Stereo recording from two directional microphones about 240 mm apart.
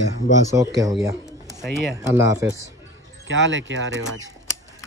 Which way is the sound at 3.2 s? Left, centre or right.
Right.